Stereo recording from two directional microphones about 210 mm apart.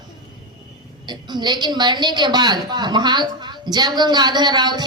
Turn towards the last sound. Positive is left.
turn(degrees=-20)  # may be behind; listen again after turning